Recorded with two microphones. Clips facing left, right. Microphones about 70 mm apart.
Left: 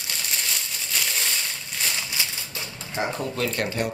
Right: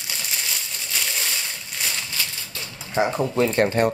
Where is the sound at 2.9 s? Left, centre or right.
Right.